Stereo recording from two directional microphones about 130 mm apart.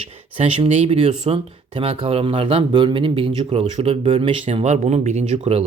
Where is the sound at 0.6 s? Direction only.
55° right (ahead or behind).